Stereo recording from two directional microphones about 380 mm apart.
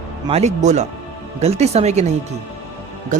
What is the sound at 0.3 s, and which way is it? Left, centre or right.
Speech, centre.